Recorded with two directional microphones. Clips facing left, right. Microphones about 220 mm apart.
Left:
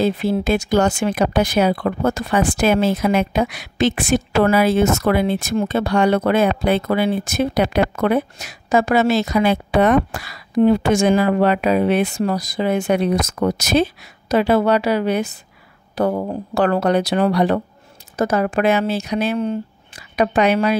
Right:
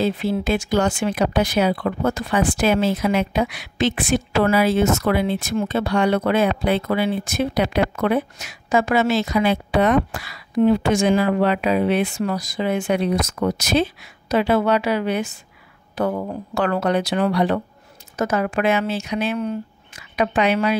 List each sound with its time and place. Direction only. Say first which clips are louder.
0.0 s speech: left 3 dB; 45° left (ahead or behind)